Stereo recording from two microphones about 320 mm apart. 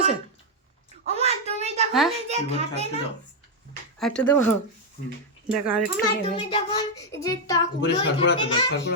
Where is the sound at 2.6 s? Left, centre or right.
Centre.